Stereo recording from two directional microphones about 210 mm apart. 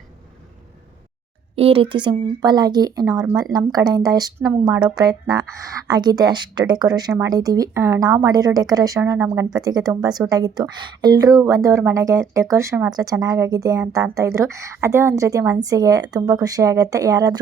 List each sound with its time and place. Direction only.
1.5 s speech: 25° right (ahead or behind)